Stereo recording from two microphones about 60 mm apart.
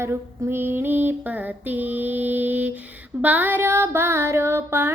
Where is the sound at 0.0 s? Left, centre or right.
Right.